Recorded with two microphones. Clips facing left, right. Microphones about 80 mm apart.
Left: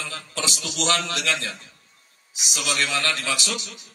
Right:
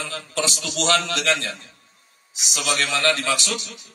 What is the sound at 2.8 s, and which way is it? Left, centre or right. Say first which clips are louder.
Speech: right 5 dB; right.